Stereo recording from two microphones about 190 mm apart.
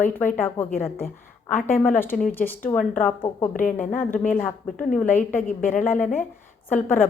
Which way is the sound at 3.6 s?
45° left (ahead or behind).